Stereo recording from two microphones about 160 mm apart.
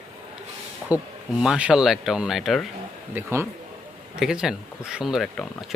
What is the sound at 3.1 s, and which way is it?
Speech, 10° right (ahead or behind).